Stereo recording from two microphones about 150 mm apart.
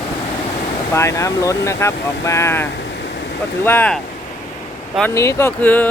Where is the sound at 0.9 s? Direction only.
20° left (ahead or behind).